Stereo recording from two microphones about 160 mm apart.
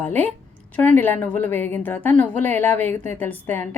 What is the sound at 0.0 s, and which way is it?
A woman's voice, 10° left (ahead or behind).